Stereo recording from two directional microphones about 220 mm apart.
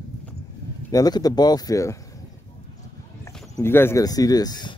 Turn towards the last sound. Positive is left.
turn(degrees=20)  # may be behind; listen again after turning